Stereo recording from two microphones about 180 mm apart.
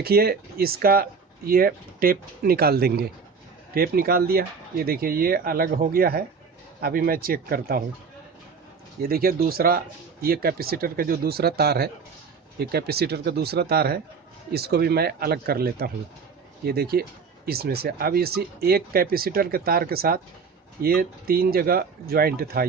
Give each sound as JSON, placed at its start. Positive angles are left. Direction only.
{"t": 0.0, "sound": "speech", "side_deg": -60}
{"t": 9.0, "sound": "speech", "side_deg": -55}